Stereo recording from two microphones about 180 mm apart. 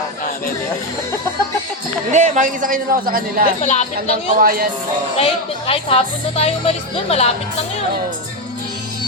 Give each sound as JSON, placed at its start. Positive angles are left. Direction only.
{"t": 2.1, "sound": "a man's voice", "side_deg": -45}
{"t": 3.6, "sound": "speech", "side_deg": 40}
{"t": 4.4, "sound": "speech", "side_deg": -55}
{"t": 5.1, "sound": "speech", "side_deg": 30}